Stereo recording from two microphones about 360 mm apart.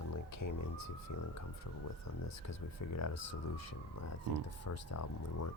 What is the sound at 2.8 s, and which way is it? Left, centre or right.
Speech, left.